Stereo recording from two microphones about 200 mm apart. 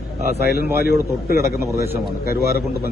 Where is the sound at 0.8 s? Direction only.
50° left (ahead or behind).